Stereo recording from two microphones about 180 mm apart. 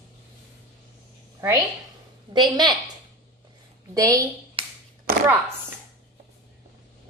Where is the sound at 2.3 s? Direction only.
25° right (ahead or behind).